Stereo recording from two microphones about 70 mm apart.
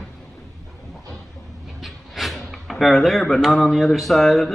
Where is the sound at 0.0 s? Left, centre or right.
Centre.